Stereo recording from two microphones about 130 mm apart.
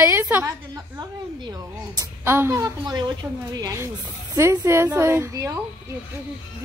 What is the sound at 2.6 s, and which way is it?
A woman's voice, 35° right (ahead or behind).